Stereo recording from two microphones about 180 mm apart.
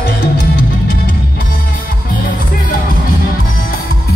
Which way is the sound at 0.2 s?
60° left (ahead or behind).